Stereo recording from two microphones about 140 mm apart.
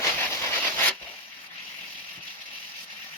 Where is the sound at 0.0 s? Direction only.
15° left (ahead or behind).